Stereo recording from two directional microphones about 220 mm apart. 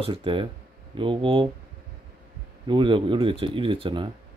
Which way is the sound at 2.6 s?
20° right (ahead or behind).